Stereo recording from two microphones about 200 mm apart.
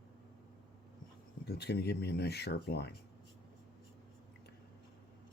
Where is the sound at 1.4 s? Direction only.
55° left (ahead or behind).